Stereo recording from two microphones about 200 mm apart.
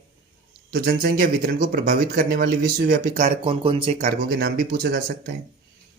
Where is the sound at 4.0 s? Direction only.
45° right (ahead or behind).